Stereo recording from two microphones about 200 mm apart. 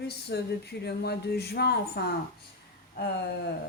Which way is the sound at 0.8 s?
55° left (ahead or behind).